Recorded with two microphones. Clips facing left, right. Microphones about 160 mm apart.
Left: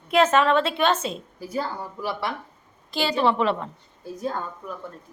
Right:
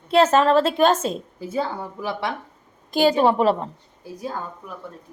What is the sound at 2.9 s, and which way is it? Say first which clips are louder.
Speech: right 5 dB; 45° right (ahead or behind).